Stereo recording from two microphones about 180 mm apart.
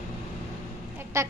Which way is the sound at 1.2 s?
15° right (ahead or behind).